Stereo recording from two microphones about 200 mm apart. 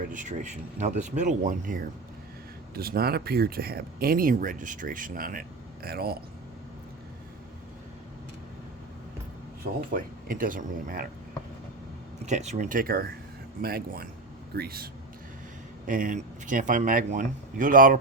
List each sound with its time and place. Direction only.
0.0 s speech: 40° right (ahead or behind)
9.9 s speech: 45° right (ahead or behind)
12.2 s speech: 35° right (ahead or behind); by 14.8 s 50° right (ahead or behind)
15.9 s speech: 40° right (ahead or behind)